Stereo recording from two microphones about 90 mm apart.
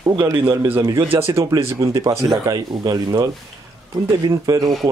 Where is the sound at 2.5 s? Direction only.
50° right (ahead or behind).